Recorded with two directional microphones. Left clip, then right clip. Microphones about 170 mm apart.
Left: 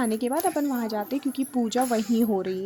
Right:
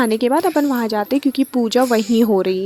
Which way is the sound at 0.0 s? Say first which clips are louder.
Right 9 dB; 50° right (ahead or behind).